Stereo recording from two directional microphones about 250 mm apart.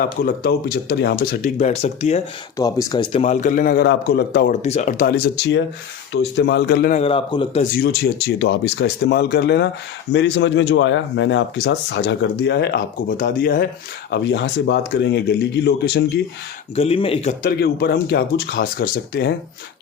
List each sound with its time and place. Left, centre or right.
0.0 s speech: left
2.6 s speech: centre; by 4.5 s left
4.6 s speech: left
7.0 s speech: left
7.6 s speech: left
16.7 s speech: left
17.6 s speech: left